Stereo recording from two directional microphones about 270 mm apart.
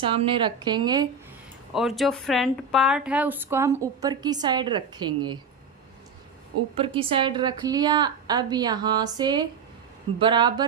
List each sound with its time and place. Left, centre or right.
0.0 s a woman's voice: centre
1.7 s a woman's voice: centre
6.7 s a woman's voice: centre